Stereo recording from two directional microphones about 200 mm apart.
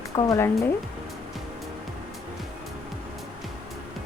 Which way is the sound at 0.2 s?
15° left (ahead or behind).